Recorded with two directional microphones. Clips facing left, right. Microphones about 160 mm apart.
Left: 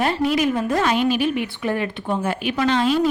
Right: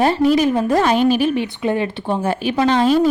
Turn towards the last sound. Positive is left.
turn(degrees=-40)  # may be behind; listen again after turning